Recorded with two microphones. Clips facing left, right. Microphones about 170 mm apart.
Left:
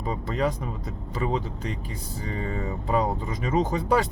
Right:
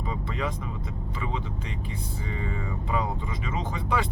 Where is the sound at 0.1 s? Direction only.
40° left (ahead or behind).